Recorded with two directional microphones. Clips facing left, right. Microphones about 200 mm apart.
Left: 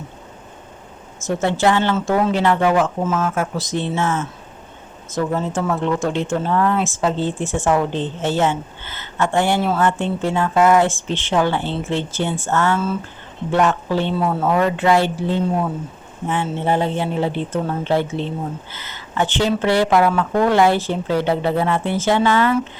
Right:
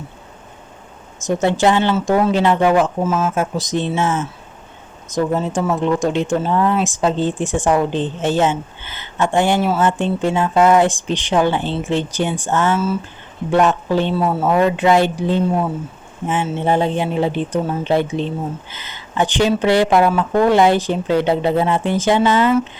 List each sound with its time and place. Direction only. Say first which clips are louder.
1.2 s speech: right 2 dB; 15° right (ahead or behind)
2.3 s speech: right 2 dB; 15° right (ahead or behind)
3.2 s speech: right 2 dB; 20° right (ahead or behind)
14.2 s speech: right 2 dB; 5° right (ahead or behind)
14.5 s speech: right 3 dB; 15° right (ahead or behind)